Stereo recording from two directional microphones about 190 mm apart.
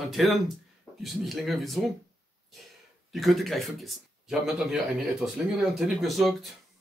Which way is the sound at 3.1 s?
Centre (ahead or behind).